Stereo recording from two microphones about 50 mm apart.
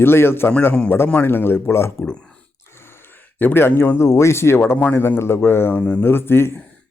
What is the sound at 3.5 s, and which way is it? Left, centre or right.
Speech, left.